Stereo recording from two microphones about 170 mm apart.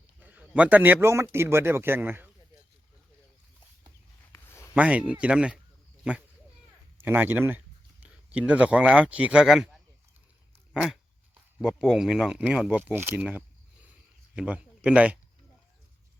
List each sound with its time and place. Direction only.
0.2 s a man's voice: 10° right (ahead or behind)
4.3 s a sound: 15° left (ahead or behind)
4.7 s speech: 10° right (ahead or behind)
11.6 s speech: 5° right (ahead or behind)